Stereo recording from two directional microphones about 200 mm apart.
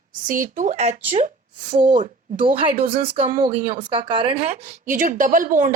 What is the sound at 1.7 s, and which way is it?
Speech, 40° right (ahead or behind).